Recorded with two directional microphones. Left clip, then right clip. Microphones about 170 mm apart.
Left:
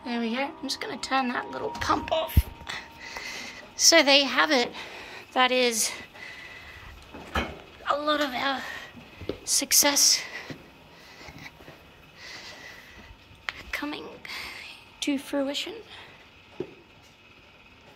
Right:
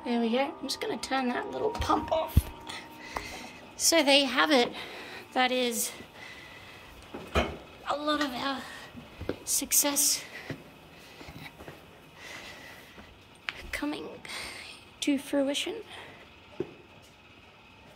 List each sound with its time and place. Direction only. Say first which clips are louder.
0.0 s a woman's voice: right 1 dB; 5° right (ahead or behind)
7.8 s a woman's voice: left 4 dB; centre (ahead or behind)
12.2 s a sound: left 2 dB; 20° right (ahead or behind)
13.6 s whispering: left 1 dB; 5° right (ahead or behind)